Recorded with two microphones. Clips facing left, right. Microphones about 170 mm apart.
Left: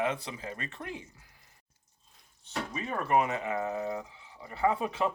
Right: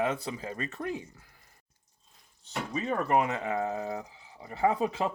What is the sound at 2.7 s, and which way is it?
Speech, 35° right (ahead or behind).